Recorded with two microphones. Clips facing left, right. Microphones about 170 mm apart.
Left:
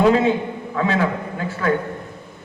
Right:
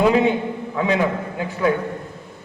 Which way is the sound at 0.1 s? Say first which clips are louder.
Even; 15° right (ahead or behind).